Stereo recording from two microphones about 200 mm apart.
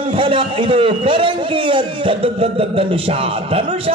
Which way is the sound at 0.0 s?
25° right (ahead or behind).